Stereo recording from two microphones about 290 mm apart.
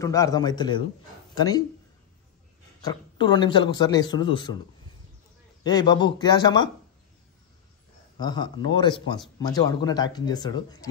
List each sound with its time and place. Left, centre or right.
0.0 s speech: centre
2.8 s speech: centre
5.6 s speech: centre
8.2 s speech: centre